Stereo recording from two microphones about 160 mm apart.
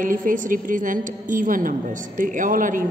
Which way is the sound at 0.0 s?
55° right (ahead or behind).